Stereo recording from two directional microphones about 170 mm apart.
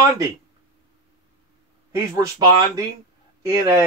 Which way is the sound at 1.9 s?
20° right (ahead or behind).